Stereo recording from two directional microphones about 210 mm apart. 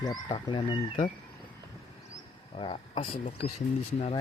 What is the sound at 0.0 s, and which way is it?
Speech, 20° left (ahead or behind).